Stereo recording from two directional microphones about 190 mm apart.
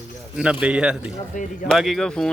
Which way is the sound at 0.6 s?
5° right (ahead or behind).